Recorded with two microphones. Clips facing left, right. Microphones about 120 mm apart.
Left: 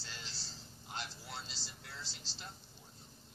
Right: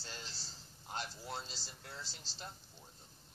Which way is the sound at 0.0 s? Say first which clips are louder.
Right 1 dB; 45° right (ahead or behind).